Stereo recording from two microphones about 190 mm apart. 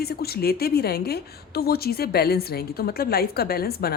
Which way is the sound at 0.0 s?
55° left (ahead or behind).